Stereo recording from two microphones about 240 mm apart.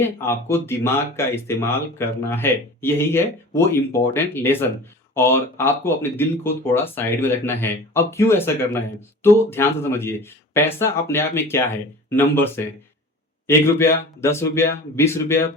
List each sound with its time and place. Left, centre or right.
0.0 s speech: centre